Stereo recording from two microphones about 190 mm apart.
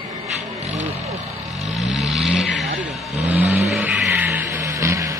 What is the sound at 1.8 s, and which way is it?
Vehicle, centre (ahead or behind).